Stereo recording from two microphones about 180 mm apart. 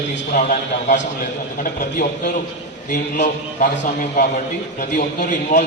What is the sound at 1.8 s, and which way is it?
A man's voice, 50° left (ahead or behind).